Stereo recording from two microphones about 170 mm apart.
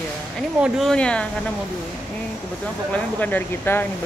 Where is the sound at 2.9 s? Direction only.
10° left (ahead or behind).